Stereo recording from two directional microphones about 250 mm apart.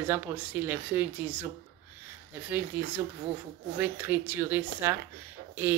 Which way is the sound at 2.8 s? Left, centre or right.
Centre.